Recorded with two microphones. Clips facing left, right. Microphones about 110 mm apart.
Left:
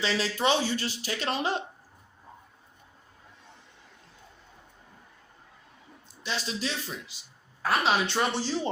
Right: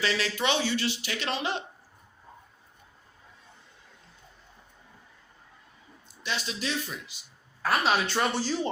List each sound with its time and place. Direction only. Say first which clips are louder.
0.0 s speech: left 1 dB; 35° left (ahead or behind)
6.2 s speech: even; 35° left (ahead or behind)
7.6 s a woman's voice: even; 20° left (ahead or behind)